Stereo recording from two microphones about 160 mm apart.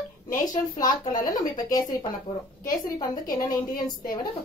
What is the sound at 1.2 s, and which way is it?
Speech, 25° left (ahead or behind).